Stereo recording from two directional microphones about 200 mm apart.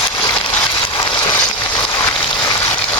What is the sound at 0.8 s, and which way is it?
Vehicle, 20° left (ahead or behind).